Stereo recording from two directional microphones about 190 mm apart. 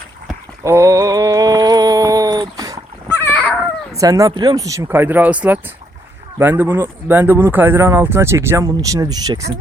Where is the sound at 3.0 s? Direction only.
10° left (ahead or behind).